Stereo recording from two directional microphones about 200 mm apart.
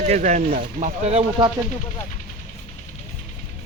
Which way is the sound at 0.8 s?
30° right (ahead or behind).